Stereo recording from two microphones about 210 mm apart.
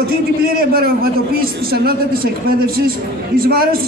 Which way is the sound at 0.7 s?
45° right (ahead or behind).